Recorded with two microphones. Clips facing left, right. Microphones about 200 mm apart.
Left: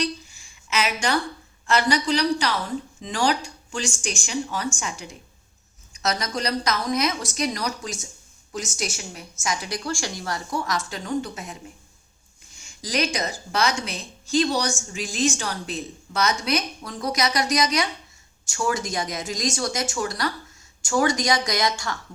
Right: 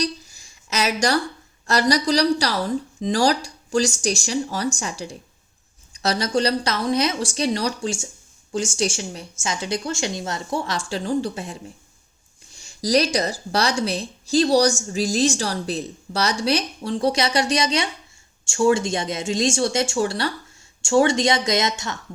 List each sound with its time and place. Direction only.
0.0 s a sound: 40° right (ahead or behind)
1.6 s a woman's voice: 35° right (ahead or behind)
12.5 s a woman's voice: 35° right (ahead or behind)